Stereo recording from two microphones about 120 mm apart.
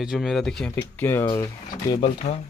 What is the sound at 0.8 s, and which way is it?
Speech, 20° left (ahead or behind).